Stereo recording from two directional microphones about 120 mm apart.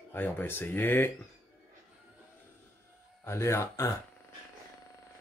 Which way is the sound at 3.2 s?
25° left (ahead or behind).